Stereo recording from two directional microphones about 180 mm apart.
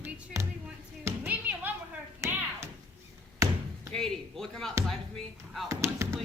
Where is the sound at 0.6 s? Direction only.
10° right (ahead or behind).